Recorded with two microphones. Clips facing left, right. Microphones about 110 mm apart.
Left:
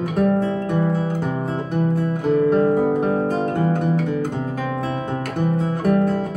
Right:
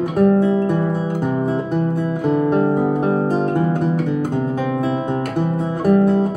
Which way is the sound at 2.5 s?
10° right (ahead or behind).